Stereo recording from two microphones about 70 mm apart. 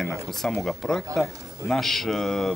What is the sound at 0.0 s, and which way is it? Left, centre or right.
Speech, centre.